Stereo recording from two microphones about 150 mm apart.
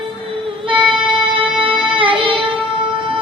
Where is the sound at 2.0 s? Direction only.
35° right (ahead or behind).